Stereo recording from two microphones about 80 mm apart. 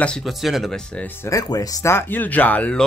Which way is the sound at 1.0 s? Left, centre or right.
Left.